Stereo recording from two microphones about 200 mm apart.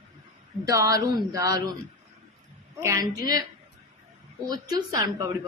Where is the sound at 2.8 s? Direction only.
15° right (ahead or behind).